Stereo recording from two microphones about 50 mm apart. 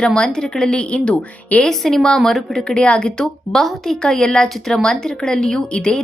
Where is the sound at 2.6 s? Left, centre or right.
Left.